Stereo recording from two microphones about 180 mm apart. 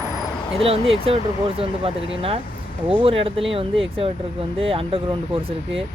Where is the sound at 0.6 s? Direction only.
30° right (ahead or behind).